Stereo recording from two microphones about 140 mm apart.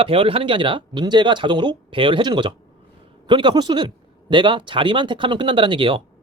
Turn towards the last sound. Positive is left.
turn(degrees=-35)  # may be behind; listen again after turning